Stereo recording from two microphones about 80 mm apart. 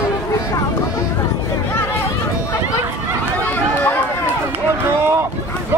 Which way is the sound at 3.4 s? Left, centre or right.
Left.